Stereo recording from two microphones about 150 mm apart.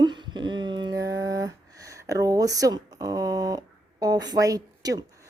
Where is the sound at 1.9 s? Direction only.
20° right (ahead or behind).